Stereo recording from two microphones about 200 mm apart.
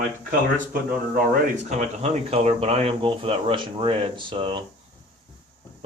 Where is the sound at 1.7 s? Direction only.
35° right (ahead or behind).